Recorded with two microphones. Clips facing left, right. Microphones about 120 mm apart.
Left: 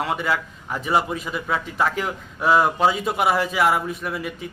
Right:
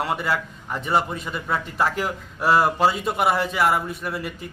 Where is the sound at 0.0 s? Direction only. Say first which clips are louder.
Left 1 dB; centre (ahead or behind).